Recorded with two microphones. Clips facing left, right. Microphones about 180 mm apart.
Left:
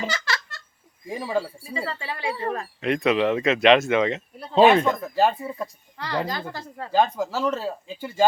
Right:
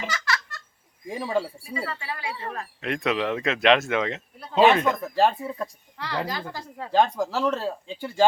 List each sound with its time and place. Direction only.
0.0 s giggle: 30° left (ahead or behind)
1.1 s speech: 5° left (ahead or behind)
1.6 s speech: 25° left (ahead or behind)
2.8 s speech: centre (ahead or behind)
4.4 s speech: 30° left (ahead or behind)
5.1 s speech: 5° left (ahead or behind); by 6.9 s 10° right (ahead or behind)
6.9 s speech: 5° left (ahead or behind)